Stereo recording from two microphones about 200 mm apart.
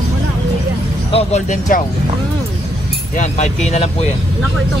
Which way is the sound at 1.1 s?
35° left (ahead or behind).